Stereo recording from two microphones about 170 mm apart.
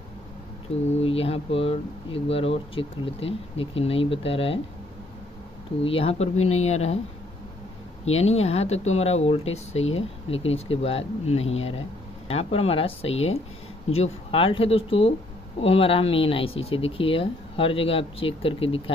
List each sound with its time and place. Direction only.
0.9 s speech: 35° left (ahead or behind)
5.9 s speech: 35° left (ahead or behind)
8.2 s speech: 40° left (ahead or behind)